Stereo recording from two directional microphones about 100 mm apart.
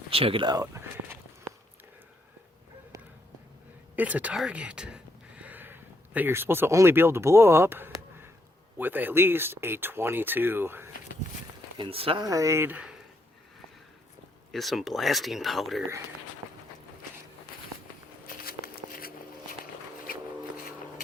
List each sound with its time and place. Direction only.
0.1 s speech: 70° right (ahead or behind)
0.4 s walk: 35° right (ahead or behind)
3.9 s speech: 15° right (ahead or behind)
11.8 s speech: 70° right (ahead or behind)
12.2 s speech: 35° right (ahead or behind)
14.5 s speech: centre (ahead or behind)